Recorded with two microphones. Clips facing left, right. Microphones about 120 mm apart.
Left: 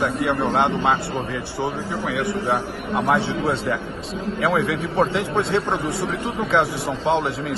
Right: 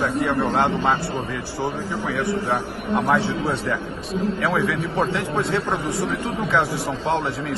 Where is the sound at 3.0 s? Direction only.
20° left (ahead or behind).